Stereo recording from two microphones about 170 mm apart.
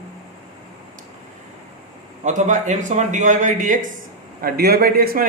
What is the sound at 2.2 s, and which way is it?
A man's voice, 45° right (ahead or behind).